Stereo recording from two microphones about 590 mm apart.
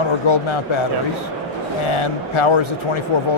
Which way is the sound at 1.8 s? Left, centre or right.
Left.